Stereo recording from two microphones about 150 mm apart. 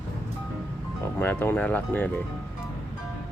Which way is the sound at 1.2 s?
15° left (ahead or behind).